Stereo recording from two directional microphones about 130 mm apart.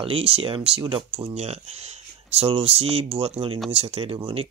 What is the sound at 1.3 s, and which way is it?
Speech, 55° right (ahead or behind).